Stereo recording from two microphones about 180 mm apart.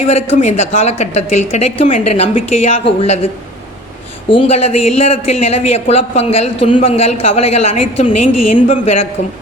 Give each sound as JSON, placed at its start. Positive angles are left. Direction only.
{"t": 0.0, "sound": "a man's voice", "side_deg": 35}
{"t": 4.3, "sound": "a man's voice", "side_deg": 30}